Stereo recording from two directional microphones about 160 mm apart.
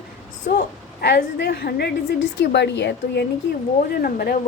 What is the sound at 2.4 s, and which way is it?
Speech, 90° left.